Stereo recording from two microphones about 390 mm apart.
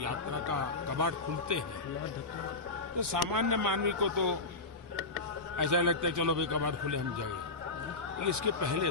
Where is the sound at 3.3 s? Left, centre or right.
Right.